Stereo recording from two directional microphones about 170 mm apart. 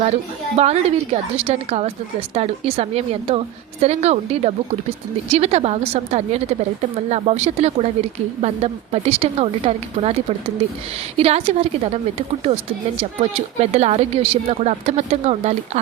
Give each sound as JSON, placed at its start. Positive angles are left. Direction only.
{"t": 0.0, "sound": "a woman's voice", "side_deg": -40}